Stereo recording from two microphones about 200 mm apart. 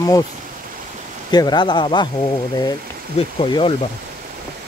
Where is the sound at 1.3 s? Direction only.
20° left (ahead or behind).